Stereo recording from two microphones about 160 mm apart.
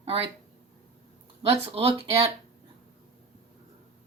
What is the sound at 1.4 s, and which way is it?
Speech, 35° right (ahead or behind).